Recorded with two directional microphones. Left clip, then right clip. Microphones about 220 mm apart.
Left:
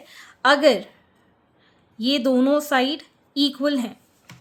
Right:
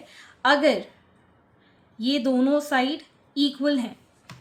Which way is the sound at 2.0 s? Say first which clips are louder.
Left 3 dB; 40° left (ahead or behind).